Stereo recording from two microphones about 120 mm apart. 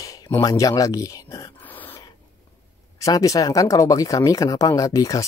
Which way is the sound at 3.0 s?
30° left (ahead or behind).